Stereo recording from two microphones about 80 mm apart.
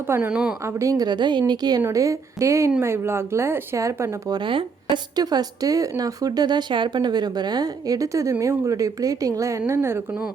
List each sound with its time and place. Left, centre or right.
0.2 s a woman's voice: centre
0.6 s speech: right
0.9 s a woman's voice: right
1.9 s speech: right
3.8 s speech: right
4.4 s speech: right
5.1 s speech: right